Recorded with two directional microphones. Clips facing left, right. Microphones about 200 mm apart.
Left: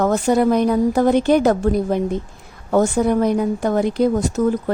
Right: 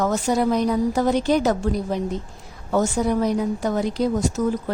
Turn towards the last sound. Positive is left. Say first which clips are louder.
# left 4 dB
turn(degrees=55)  # may be behind; listen again after turning